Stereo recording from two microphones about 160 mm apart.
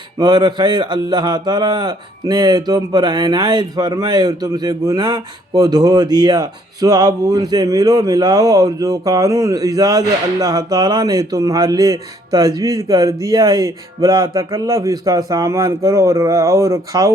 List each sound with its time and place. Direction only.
0.2 s speech: 25° right (ahead or behind)